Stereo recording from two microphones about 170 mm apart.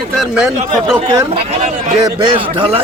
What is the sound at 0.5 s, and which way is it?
Speech, 45° right (ahead or behind).